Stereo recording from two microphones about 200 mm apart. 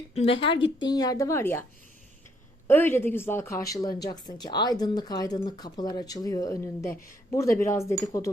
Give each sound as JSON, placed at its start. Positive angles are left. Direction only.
{"t": 0.1, "sound": "speech", "side_deg": 30}
{"t": 2.6, "sound": "speech", "side_deg": 10}